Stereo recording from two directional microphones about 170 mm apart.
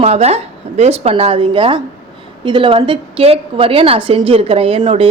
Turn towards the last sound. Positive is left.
turn(degrees=-30)  # may be behind; listen again after turning